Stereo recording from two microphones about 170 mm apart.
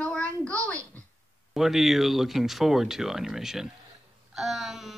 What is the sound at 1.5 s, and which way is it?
Speech, centre (ahead or behind).